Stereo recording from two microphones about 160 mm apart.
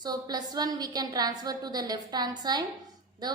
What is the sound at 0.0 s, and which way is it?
A woman's voice, 25° right (ahead or behind).